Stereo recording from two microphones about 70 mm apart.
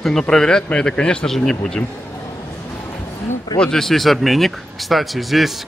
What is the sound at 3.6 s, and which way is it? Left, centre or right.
A man's voice, centre.